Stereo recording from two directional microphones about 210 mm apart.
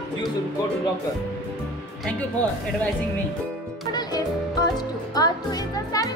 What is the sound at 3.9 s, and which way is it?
Music, 20° left (ahead or behind).